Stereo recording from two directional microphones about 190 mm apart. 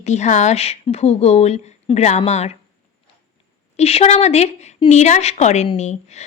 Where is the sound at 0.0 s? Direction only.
35° left (ahead or behind).